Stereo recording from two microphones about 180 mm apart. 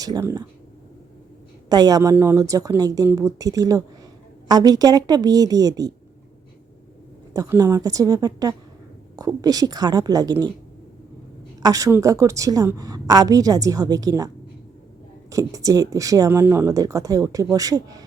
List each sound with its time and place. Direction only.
0.0 s speech: 15° right (ahead or behind)
1.7 s speech: 20° right (ahead or behind)
7.3 s speech: 20° right (ahead or behind)
11.6 s speech: 20° right (ahead or behind)
15.3 s speech: 20° right (ahead or behind)